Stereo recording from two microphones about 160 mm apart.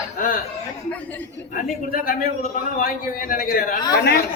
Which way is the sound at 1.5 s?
60° left (ahead or behind).